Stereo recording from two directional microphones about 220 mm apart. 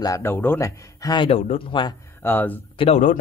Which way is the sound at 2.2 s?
10° left (ahead or behind).